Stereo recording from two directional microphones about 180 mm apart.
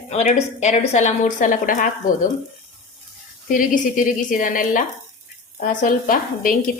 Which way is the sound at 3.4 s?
45° left (ahead or behind).